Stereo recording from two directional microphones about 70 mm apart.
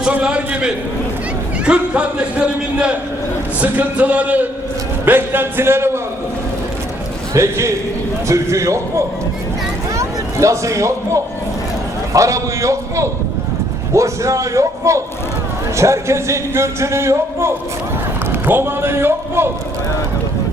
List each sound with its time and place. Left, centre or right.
0.1 s speech: centre; by 6.0 s right
7.3 s speech: right
18.3 s speech: right